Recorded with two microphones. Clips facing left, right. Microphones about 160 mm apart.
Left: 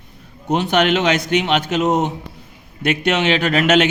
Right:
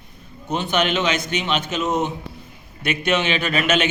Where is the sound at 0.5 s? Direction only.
75° left (ahead or behind).